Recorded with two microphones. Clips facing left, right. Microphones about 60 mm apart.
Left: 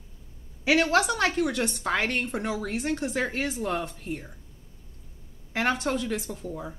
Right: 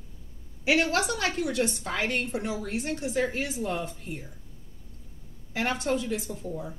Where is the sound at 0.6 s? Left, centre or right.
Left.